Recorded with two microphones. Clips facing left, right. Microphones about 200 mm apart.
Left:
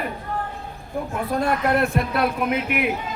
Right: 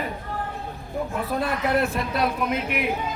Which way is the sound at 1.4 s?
55° left (ahead or behind).